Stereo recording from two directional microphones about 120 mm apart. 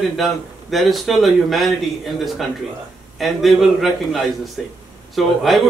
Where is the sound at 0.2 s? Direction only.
Centre (ahead or behind).